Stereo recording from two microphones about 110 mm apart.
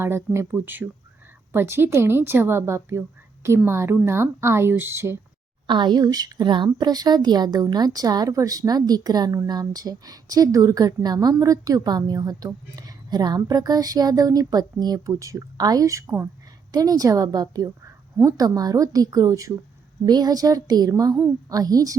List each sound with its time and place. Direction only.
0.0 s speech: 25° right (ahead or behind)
5.6 s a woman's voice: 45° right (ahead or behind)